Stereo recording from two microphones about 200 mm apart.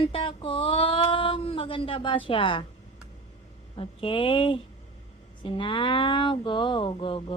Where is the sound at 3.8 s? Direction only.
25° left (ahead or behind).